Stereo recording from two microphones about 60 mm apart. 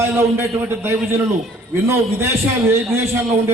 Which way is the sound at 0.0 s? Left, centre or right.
Right.